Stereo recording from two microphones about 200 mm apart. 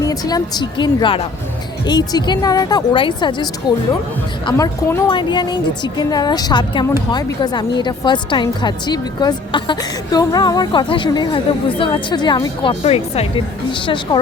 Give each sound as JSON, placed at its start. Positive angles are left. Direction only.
{"t": 0.0, "sound": "speech", "side_deg": 20}